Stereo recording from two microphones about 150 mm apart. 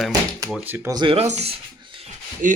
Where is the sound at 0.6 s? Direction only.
10° right (ahead or behind).